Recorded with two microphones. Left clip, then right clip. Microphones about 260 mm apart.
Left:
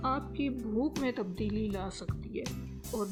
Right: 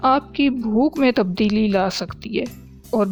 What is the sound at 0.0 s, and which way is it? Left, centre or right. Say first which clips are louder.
Speech: right 16 dB; right.